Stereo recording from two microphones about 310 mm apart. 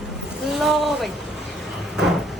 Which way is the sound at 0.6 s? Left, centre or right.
Centre.